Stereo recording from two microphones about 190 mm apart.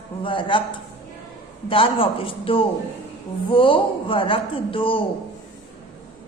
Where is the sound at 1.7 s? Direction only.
30° left (ahead or behind).